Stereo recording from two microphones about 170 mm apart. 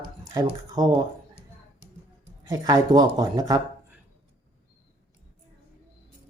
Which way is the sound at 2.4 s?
20° right (ahead or behind).